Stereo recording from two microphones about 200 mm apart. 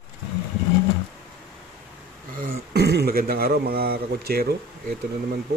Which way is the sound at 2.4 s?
55° right (ahead or behind).